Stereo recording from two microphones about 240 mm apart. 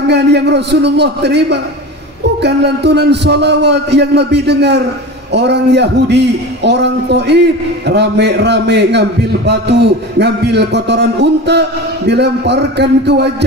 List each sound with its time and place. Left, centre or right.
0.1 s a man's voice: right